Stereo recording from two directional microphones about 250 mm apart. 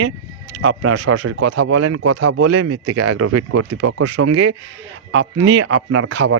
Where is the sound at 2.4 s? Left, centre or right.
Right.